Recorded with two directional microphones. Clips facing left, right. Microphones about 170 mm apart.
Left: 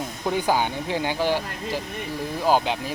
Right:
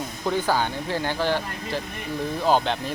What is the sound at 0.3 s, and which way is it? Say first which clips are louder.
Speech: left 1 dB; 15° left (ahead or behind).